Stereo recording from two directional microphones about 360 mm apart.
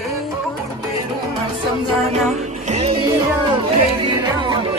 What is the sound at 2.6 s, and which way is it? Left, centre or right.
Music, centre.